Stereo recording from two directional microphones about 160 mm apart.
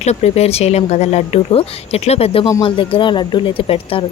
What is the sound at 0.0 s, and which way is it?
Speech, 40° left (ahead or behind).